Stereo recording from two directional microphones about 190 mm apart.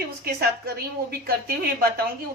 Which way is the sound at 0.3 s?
55° right (ahead or behind).